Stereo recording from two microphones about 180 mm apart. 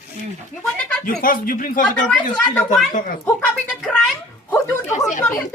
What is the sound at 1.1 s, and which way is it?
Speech, 50° left (ahead or behind).